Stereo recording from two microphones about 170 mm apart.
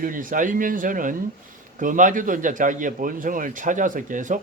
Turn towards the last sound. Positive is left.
turn(degrees=-50)  # may be behind; listen again after turning